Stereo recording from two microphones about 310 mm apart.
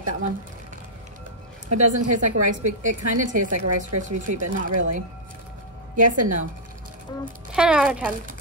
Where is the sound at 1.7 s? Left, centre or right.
Right.